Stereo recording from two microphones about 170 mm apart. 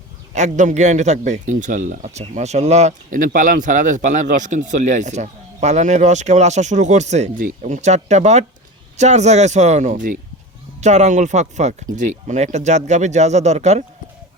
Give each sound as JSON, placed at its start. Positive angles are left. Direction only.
{"t": 0.3, "sound": "speech", "side_deg": -45}